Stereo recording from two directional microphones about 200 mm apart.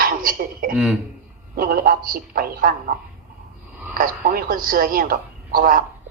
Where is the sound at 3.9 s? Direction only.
45° right (ahead or behind).